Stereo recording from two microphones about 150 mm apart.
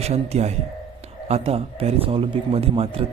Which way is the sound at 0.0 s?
45° right (ahead or behind).